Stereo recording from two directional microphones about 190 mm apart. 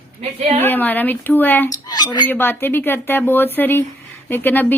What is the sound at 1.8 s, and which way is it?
Dishes, 20° left (ahead or behind).